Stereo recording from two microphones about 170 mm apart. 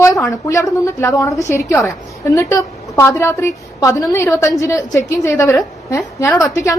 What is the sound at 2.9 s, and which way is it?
A woman's voice, 15° left (ahead or behind).